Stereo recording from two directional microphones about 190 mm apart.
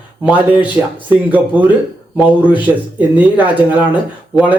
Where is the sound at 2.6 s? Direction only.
10° right (ahead or behind).